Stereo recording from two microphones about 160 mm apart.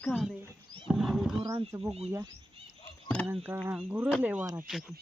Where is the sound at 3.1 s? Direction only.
5° left (ahead or behind).